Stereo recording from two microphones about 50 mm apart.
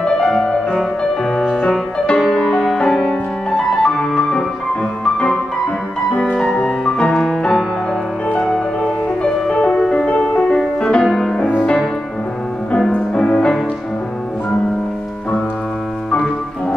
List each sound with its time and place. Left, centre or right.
0.0 s music: centre
8.8 s music: left
10.0 s music: left
11.1 s music: centre
13.1 s music: centre